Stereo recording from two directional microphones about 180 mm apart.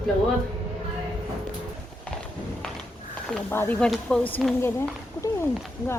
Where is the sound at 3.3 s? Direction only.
10° left (ahead or behind).